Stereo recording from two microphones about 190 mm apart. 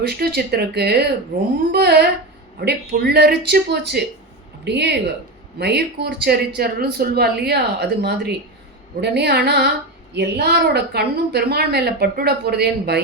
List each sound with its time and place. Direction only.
0.0 s a woman's voice: 55° right (ahead or behind)